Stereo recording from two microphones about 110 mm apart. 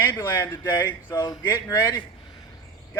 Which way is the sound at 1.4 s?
35° left (ahead or behind).